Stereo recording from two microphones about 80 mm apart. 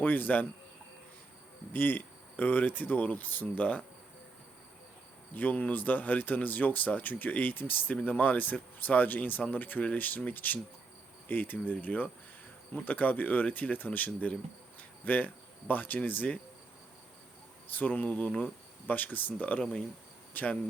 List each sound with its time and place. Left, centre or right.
0.0 s speech: left
1.7 s speech: left
5.3 s speech: left
17.7 s speech: left